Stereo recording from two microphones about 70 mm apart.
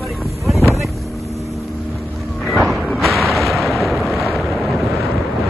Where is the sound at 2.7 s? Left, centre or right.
Centre.